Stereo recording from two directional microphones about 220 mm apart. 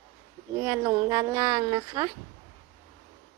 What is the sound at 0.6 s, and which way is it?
Speech, 15° right (ahead or behind).